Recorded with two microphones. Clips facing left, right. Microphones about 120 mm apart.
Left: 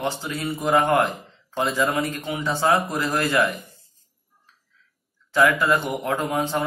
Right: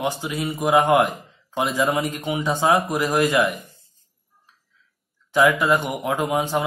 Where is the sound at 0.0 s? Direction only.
15° right (ahead or behind).